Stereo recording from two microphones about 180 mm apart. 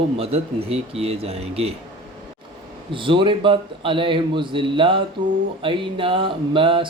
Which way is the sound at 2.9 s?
30° right (ahead or behind).